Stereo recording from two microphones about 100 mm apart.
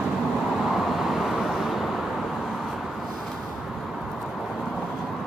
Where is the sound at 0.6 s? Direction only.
Centre (ahead or behind).